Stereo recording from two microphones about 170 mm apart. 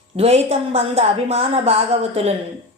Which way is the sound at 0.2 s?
35° right (ahead or behind).